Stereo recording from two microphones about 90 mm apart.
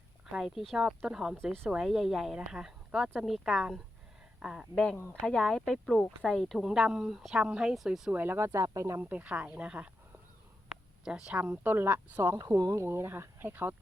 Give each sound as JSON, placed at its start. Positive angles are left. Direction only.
{"t": 0.3, "sound": "speech", "side_deg": -5}
{"t": 4.7, "sound": "speech", "side_deg": 5}
{"t": 8.1, "sound": "speech", "side_deg": -20}
{"t": 9.0, "sound": "speech", "side_deg": -20}
{"t": 11.0, "sound": "speech", "side_deg": -10}